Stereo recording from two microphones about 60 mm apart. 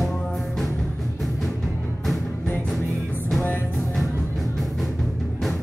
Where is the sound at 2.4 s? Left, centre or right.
Left.